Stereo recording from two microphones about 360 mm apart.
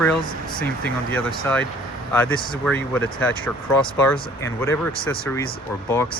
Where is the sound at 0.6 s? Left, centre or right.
Centre.